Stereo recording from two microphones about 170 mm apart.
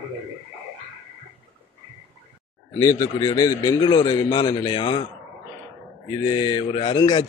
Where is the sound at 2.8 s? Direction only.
20° left (ahead or behind).